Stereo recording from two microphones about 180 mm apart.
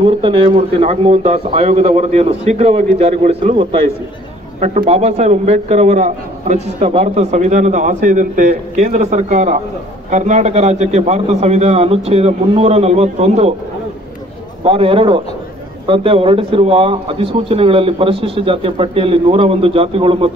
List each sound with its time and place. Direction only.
0.0 s a man's voice: 30° right (ahead or behind)
14.6 s a man's voice: 30° right (ahead or behind)